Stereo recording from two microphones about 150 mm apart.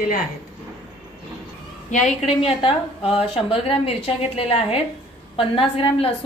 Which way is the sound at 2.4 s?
40° left (ahead or behind).